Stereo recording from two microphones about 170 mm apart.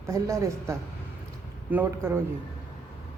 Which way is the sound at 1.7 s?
10° right (ahead or behind).